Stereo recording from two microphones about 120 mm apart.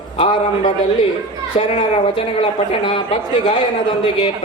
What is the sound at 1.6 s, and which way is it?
A woman's voice, 50° left (ahead or behind).